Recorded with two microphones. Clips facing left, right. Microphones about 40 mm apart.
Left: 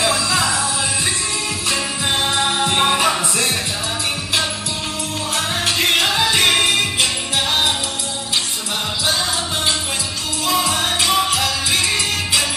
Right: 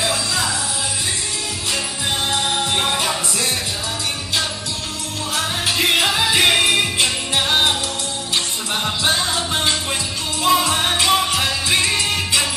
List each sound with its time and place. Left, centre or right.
0.1 s music: left
2.6 s music: left
5.3 s music: centre
7.3 s music: centre
10.5 s music: centre
11.0 s music: centre
11.2 s music: right